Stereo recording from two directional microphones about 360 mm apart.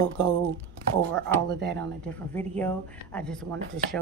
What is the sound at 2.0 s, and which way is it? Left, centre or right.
A woman's voice, centre.